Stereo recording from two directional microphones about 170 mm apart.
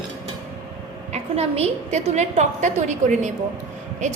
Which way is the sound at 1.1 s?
35° right (ahead or behind).